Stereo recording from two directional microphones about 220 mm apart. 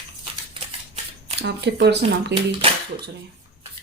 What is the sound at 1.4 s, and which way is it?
Speech, 50° right (ahead or behind).